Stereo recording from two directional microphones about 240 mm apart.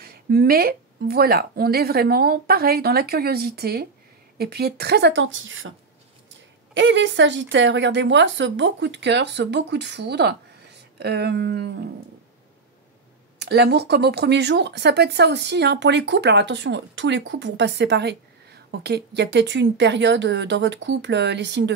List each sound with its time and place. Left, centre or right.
0.0 s a woman's voice: right
6.7 s speech: right
13.4 s speech: right